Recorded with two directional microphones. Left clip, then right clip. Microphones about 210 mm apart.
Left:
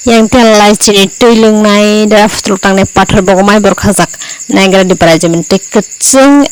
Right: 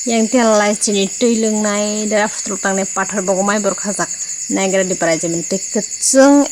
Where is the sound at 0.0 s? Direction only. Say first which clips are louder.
Left 9 dB; 45° left (ahead or behind).